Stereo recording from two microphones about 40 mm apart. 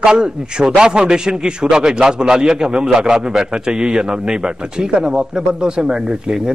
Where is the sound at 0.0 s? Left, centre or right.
Right.